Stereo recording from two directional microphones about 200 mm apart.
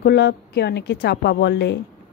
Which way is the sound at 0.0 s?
55° left (ahead or behind).